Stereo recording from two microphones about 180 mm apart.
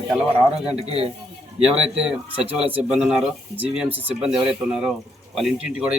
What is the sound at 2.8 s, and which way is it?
A man's voice, 5° right (ahead or behind).